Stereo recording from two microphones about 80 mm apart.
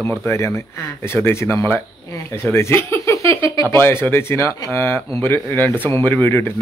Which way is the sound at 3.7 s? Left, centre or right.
Left.